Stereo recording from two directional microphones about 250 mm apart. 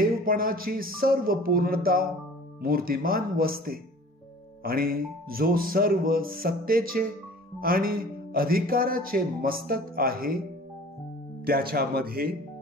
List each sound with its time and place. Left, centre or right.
0.0 s a sound: right
0.9 s speech: right
11.4 s speech: right